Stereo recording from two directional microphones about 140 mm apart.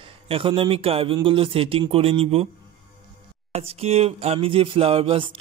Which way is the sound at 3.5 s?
45° right (ahead or behind).